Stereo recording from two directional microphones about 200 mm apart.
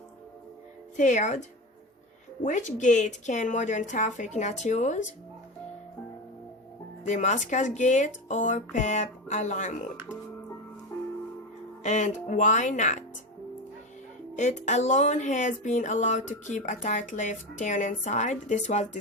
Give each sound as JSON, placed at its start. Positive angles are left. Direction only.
{"t": 0.9, "sound": "speech", "side_deg": 35}
{"t": 7.0, "sound": "speech", "side_deg": 35}
{"t": 11.8, "sound": "speech", "side_deg": 35}
{"t": 14.3, "sound": "speech", "side_deg": 35}